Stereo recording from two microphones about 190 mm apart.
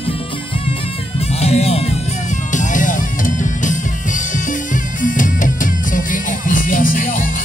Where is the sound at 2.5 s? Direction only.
45° left (ahead or behind).